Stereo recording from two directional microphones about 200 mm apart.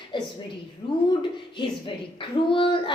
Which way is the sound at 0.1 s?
20° left (ahead or behind).